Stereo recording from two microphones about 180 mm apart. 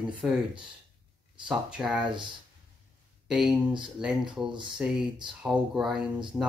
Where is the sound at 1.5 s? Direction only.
5° right (ahead or behind).